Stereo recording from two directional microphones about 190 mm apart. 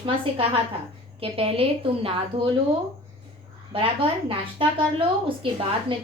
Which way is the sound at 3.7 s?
30° right (ahead or behind).